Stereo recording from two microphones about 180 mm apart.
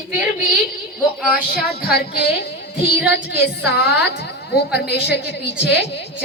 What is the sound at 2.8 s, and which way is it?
Music, 65° left (ahead or behind).